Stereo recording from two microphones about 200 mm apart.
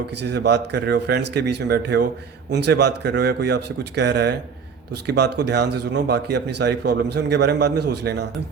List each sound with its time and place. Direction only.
0.2 s speech: 55° right (ahead or behind)